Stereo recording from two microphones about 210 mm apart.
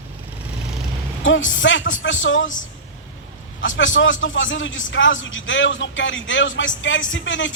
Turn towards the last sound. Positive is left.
turn(degrees=65)  # may be behind; listen again after turning